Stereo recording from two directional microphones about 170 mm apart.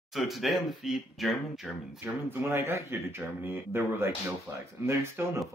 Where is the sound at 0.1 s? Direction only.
Centre (ahead or behind).